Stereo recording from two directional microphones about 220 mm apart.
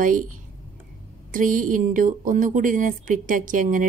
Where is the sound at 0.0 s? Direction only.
35° right (ahead or behind).